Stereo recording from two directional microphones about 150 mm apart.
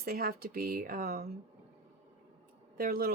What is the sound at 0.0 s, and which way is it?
Speech, 90° right.